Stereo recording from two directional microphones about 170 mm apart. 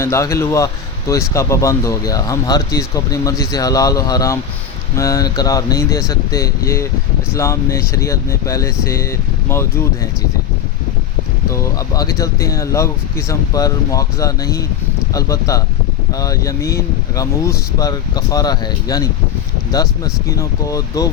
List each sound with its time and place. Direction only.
0.0 s speech: 15° left (ahead or behind)
11.5 s speech: 20° left (ahead or behind)